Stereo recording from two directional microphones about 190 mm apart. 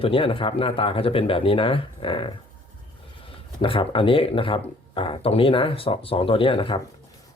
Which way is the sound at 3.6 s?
25° left (ahead or behind).